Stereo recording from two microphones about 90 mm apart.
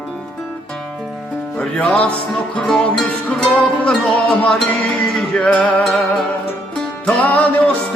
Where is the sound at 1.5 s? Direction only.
10° left (ahead or behind).